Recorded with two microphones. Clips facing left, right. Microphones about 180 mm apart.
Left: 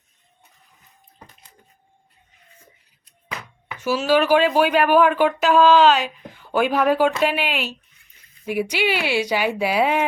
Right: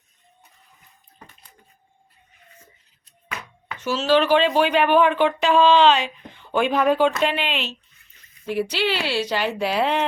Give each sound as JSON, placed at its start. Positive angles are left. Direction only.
{"t": 3.7, "sound": "speech", "side_deg": 10}